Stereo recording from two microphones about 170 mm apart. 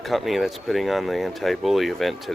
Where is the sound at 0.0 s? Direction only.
Centre (ahead or behind).